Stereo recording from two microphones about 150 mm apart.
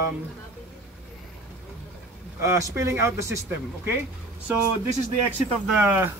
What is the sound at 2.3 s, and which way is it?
Speech, 20° right (ahead or behind).